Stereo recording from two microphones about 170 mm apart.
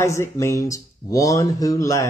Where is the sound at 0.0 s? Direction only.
15° left (ahead or behind).